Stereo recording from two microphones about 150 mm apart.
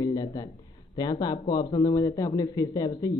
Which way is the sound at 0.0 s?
25° left (ahead or behind).